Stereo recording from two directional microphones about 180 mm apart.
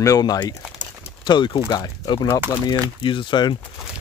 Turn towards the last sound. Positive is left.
turn(degrees=25)  # may be behind; listen again after turning